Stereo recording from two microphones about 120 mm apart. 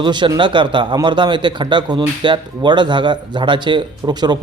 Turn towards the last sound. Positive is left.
turn(degrees=-35)  # may be behind; listen again after turning